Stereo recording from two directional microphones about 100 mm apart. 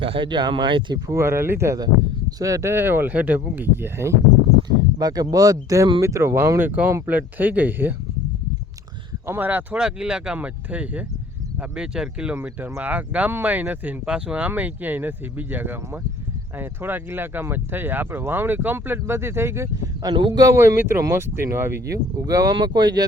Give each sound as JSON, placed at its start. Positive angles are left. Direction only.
{"t": 0.0, "sound": "speech", "side_deg": -60}
{"t": 1.0, "sound": "speech", "side_deg": -30}
{"t": 4.9, "sound": "speech", "side_deg": -40}
{"t": 9.2, "sound": "speech", "side_deg": -20}
{"t": 9.8, "sound": "speech", "side_deg": -10}
{"t": 20.6, "sound": "speech", "side_deg": -25}